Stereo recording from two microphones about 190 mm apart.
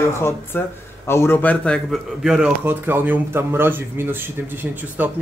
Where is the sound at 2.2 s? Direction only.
5° right (ahead or behind).